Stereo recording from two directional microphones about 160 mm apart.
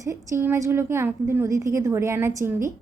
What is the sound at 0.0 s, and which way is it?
A woman's voice, 20° right (ahead or behind).